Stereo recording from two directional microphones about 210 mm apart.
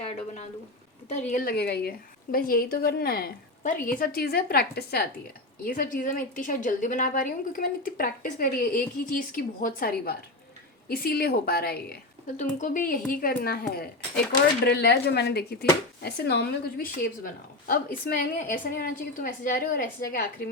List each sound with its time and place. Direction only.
1.0 s a woman's voice: 35° left (ahead or behind)
1.5 s a woman's voice: 50° left (ahead or behind)
12.4 s a woman's voice: 35° left (ahead or behind)